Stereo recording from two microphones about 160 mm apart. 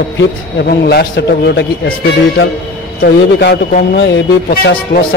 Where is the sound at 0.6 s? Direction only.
85° left.